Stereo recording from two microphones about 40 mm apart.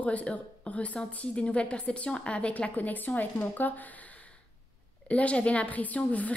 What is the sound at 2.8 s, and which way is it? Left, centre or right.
Speech, left.